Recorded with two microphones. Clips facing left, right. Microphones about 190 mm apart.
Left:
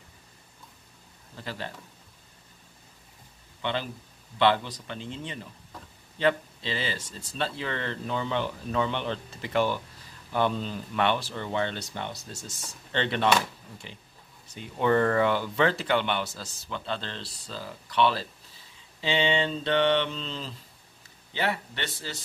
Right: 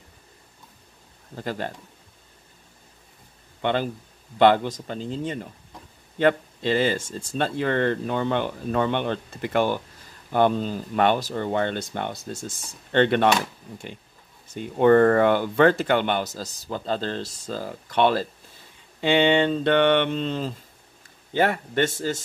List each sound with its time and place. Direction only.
1.3 s speech: 50° right (ahead or behind)
3.6 s speech: 50° right (ahead or behind)
14.5 s speech: 50° right (ahead or behind)
18.9 s a sound: 55° right (ahead or behind)
21.3 s speech: 50° right (ahead or behind)